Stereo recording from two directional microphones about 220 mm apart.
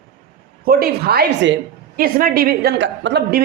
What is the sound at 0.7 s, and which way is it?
A woman's voice, 45° right (ahead or behind).